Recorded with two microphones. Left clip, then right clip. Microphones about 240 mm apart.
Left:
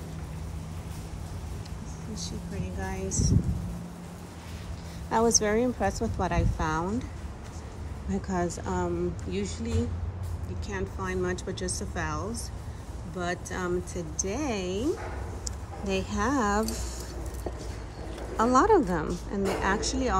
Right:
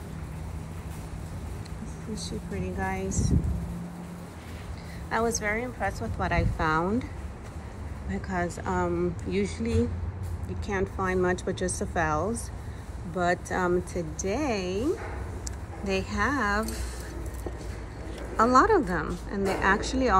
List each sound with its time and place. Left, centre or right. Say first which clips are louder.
3.1 s a woman's voice: left 1 dB; centre
5.1 s a woman's voice: left 3 dB; left
8.1 s a woman's voice: even; centre
9.3 s speech: right 4 dB; left
10.7 s speech: right 5 dB; centre
15.8 s a woman's voice: right 2 dB; centre
18.3 s a woman's voice: right 1 dB; centre